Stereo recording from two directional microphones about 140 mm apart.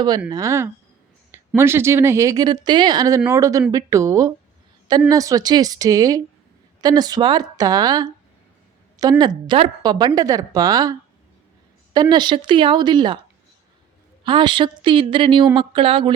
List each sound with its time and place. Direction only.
0.3 s speech: 25° right (ahead or behind)
11.9 s speech: 35° right (ahead or behind)
14.3 s speech: 35° right (ahead or behind)